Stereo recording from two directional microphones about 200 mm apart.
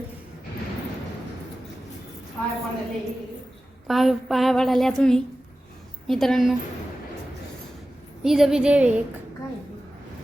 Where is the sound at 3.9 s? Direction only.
Centre (ahead or behind).